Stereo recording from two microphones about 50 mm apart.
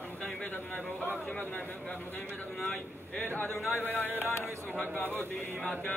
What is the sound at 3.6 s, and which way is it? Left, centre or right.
Speech, left.